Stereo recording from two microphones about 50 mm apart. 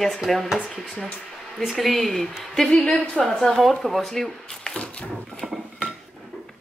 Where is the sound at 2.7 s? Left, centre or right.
Left.